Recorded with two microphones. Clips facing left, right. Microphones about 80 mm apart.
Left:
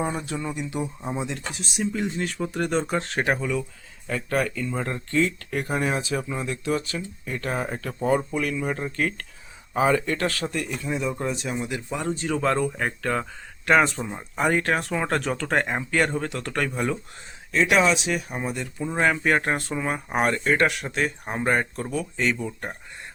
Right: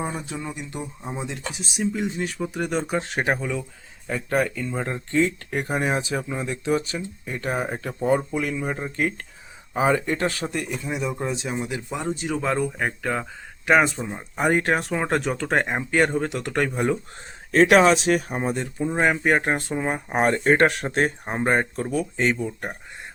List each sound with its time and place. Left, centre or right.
0.3 s speech: centre
1.8 s speech: centre
14.3 s speech: right
17.5 s speech: right
18.9 s speech: centre; by 21.1 s right
21.2 s speech: right